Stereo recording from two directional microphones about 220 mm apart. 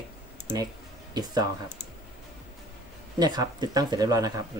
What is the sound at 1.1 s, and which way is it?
Speech, 20° right (ahead or behind).